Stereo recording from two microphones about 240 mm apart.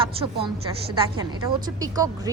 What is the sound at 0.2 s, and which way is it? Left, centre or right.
A woman's voice, right.